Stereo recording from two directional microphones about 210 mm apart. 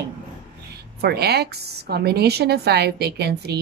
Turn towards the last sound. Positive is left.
turn(degrees=-50)  # may be behind; listen again after turning